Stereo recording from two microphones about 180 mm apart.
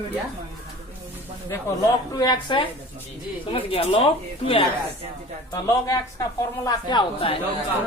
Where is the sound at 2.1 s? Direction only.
25° left (ahead or behind).